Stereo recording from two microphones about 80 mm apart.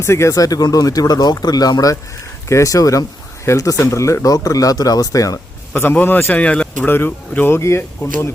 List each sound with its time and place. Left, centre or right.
0.0 s speech: left
5.7 s a man's voice: left
6.8 s a man's voice: left